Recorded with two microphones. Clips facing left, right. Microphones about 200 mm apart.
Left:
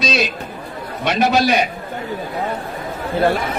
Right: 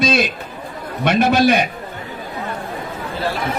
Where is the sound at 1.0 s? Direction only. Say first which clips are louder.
Right 2 dB; 55° right (ahead or behind).